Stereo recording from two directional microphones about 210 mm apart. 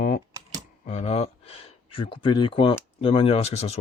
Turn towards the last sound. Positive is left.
turn(degrees=30)  # may be behind; listen again after turning